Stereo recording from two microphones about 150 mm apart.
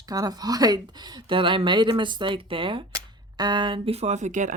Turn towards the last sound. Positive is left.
turn(degrees=-55)  # may be behind; listen again after turning